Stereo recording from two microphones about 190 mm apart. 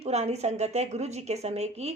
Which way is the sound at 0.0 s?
35° right (ahead or behind).